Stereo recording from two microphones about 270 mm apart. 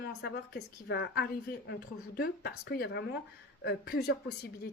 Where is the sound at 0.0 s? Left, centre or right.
Left.